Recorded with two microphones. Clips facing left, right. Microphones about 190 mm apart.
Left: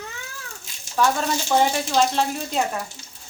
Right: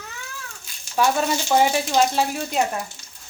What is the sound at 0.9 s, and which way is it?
Speech, 10° right (ahead or behind).